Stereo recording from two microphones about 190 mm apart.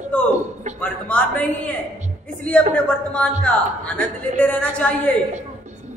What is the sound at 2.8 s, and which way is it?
A woman's voice, 5° left (ahead or behind).